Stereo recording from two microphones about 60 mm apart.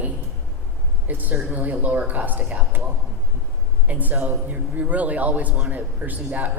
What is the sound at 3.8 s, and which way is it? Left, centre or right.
Speech, right.